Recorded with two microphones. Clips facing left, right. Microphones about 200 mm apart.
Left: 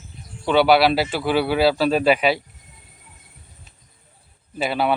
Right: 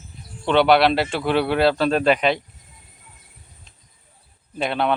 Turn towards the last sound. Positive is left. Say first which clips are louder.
# left 1 dB
turn(degrees=5)  # may be behind; listen again after turning